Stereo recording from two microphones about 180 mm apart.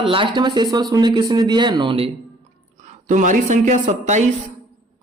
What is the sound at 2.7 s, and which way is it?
A woman's voice, 40° right (ahead or behind).